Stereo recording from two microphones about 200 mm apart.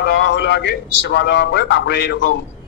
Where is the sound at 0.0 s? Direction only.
65° left (ahead or behind).